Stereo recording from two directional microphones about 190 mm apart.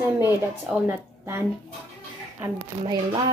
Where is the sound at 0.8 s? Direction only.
10° right (ahead or behind).